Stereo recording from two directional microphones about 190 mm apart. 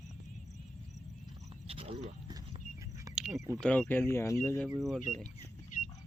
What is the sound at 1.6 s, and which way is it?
Wild animals, 30° right (ahead or behind).